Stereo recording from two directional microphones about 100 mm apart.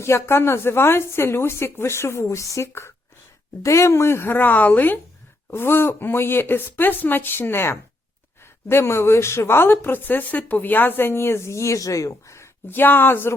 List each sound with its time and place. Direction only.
0.0 s speech: 25° left (ahead or behind)